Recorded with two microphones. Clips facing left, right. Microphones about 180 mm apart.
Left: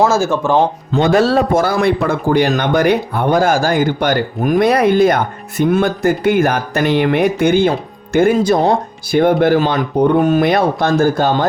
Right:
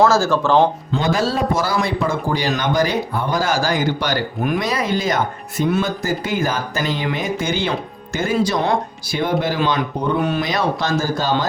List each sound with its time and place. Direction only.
0.0 s speech: 20° left (ahead or behind)
0.9 s a man's voice: 65° left (ahead or behind)